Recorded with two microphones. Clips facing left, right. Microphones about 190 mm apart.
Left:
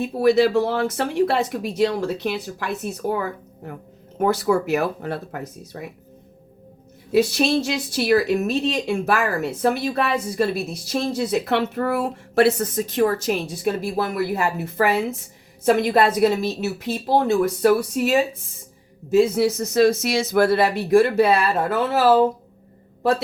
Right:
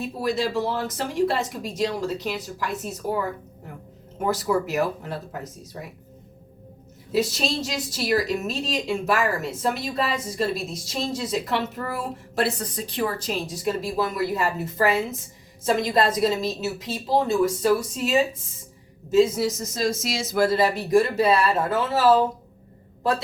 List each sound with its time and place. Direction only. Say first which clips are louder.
0.2 s a woman's voice: left 9 dB; 65° left (ahead or behind)
4.2 s a woman's voice: left 4 dB; 65° left (ahead or behind)
7.1 s a woman's voice: left 6 dB; 60° left (ahead or behind)
12.5 s a woman's voice: left 7 dB; 45° left (ahead or behind); by 22.1 s 65° left (ahead or behind)